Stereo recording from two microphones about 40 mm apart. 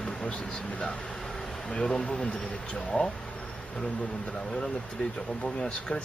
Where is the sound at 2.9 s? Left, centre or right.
Left.